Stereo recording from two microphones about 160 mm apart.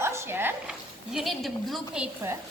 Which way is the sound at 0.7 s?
Centre (ahead or behind).